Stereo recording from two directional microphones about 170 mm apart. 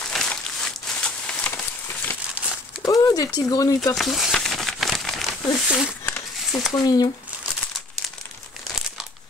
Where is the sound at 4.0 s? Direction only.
Centre (ahead or behind).